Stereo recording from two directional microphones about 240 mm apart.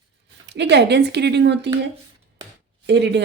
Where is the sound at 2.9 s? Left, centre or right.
Right.